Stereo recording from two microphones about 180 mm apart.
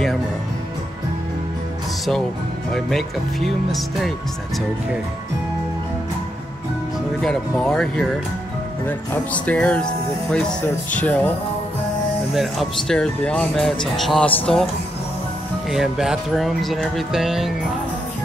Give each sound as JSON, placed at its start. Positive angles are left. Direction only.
{"t": 2.7, "sound": "speech", "side_deg": 0}
{"t": 7.2, "sound": "speech", "side_deg": 5}
{"t": 10.9, "sound": "speech", "side_deg": 10}
{"t": 12.4, "sound": "speech", "side_deg": 0}
{"t": 15.7, "sound": "speech", "side_deg": 0}